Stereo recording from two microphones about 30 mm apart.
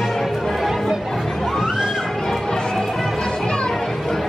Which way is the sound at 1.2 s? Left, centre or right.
Centre.